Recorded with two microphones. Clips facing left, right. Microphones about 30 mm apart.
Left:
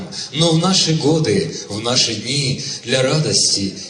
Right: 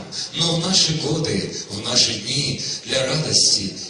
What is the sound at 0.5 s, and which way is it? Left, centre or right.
Speech, left.